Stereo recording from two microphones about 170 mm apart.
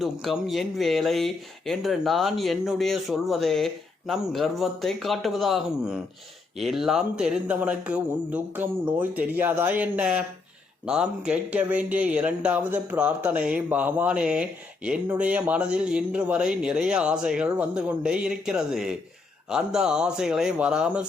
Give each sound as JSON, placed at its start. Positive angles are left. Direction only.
{"t": 0.0, "sound": "speech", "side_deg": 0}